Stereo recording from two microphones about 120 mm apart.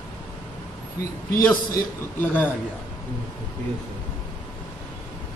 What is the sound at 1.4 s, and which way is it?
A man's voice, 20° left (ahead or behind).